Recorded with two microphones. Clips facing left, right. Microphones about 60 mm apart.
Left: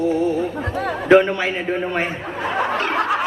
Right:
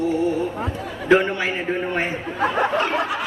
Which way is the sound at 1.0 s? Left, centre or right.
Left.